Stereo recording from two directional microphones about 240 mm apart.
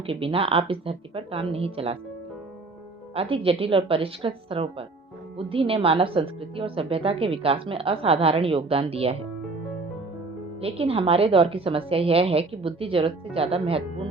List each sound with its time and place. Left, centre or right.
0.0 s a woman's voice: right
3.2 s a woman's voice: right
10.6 s a woman's voice: right